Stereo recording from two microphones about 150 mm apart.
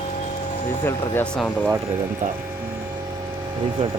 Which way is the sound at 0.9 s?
15° left (ahead or behind).